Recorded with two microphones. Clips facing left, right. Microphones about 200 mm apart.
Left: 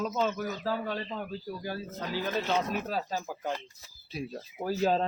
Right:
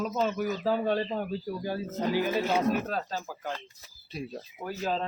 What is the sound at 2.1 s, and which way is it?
Speech, 10° right (ahead or behind).